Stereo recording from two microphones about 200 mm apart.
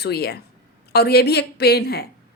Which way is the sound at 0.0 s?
50° left (ahead or behind).